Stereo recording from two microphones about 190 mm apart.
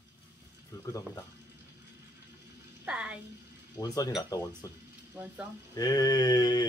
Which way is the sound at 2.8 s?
5° right (ahead or behind).